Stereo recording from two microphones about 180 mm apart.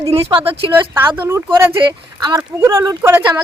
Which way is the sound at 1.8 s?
25° right (ahead or behind).